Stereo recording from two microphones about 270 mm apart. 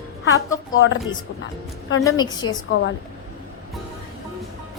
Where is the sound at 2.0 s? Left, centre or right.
Centre.